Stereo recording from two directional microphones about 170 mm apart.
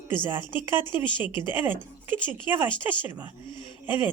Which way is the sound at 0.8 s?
30° left (ahead or behind).